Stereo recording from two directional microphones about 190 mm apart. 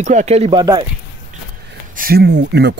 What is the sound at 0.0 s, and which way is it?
Speech, 40° right (ahead or behind).